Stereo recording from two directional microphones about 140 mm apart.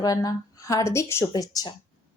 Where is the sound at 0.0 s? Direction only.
25° left (ahead or behind).